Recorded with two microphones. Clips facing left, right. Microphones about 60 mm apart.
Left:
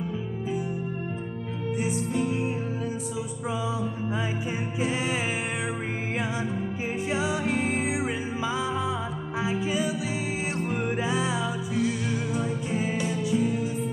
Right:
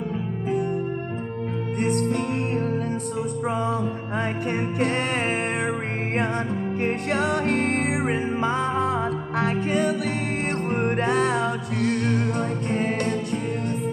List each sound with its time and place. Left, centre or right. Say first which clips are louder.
1.8 s music: right 5 dB; right
4.5 s music: right 5 dB; right
6.8 s music: right 5 dB; right